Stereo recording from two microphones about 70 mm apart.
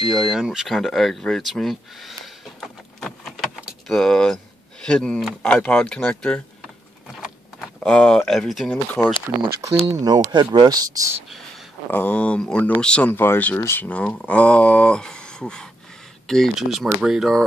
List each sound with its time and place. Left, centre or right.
0.0 s speech: centre
7.6 s speech: centre
8.6 s speech: centre
9.5 s speech: right
10.0 s speech: right
11.9 s speech: left
13.1 s speech: left
13.7 s speech: centre
16.5 s speech: centre